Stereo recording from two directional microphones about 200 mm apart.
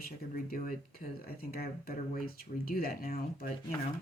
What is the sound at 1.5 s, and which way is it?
Speech, 45° left (ahead or behind).